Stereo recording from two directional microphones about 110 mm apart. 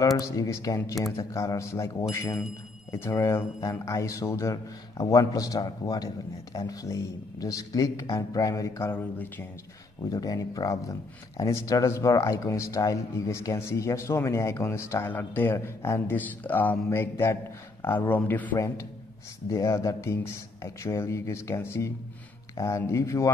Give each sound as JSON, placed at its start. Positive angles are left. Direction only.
{"t": 0.2, "sound": "speech", "side_deg": 30}
{"t": 10.0, "sound": "speech", "side_deg": 35}
{"t": 19.5, "sound": "speech", "side_deg": 30}